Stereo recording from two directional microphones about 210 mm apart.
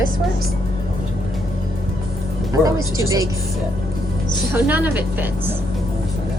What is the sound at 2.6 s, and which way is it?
Speech, 15° right (ahead or behind).